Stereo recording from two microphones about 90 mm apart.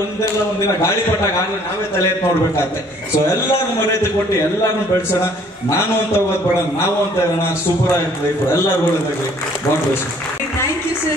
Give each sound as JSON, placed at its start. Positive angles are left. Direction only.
{"t": 3.9, "sound": "a man's voice", "side_deg": 30}
{"t": 5.7, "sound": "a man's voice", "side_deg": 30}